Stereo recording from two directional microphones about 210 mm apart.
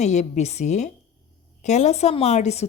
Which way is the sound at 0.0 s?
35° left (ahead or behind).